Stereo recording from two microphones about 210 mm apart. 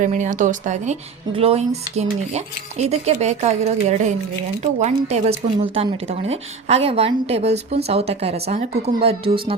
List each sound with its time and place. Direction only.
0.0 s cutlery: 35° right (ahead or behind)
4.6 s speech: 30° right (ahead or behind)